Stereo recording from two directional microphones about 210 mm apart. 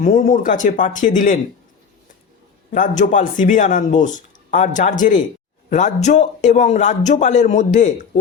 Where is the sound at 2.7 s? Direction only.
35° left (ahead or behind).